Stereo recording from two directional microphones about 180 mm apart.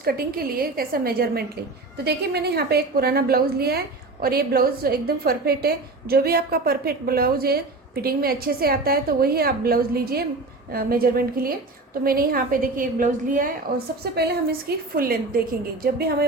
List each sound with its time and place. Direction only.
0.0 s a woman's voice: 55° right (ahead or behind)